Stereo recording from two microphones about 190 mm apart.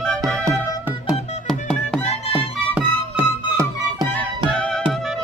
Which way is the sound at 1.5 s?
5° left (ahead or behind).